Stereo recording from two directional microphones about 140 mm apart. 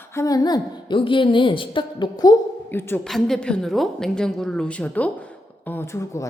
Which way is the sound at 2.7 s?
15° left (ahead or behind).